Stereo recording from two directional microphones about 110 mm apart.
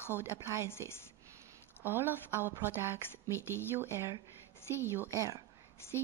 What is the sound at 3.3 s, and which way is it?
Speech, 25° left (ahead or behind).